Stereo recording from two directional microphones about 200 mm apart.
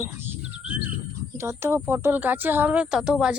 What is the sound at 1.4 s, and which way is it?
Speech, 15° right (ahead or behind).